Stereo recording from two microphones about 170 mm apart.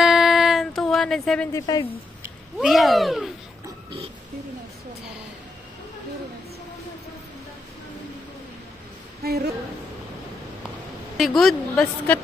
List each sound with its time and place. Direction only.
0.0 s music: centre (ahead or behind)
1.5 s a woman's voice: 20° left (ahead or behind)
2.6 s a woman's voice: centre (ahead or behind)
9.2 s a woman's voice: 65° right (ahead or behind)
11.1 s a woman's voice: centre (ahead or behind)